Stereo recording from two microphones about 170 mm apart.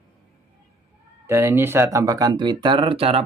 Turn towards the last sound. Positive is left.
turn(degrees=-35)  # may be behind; listen again after turning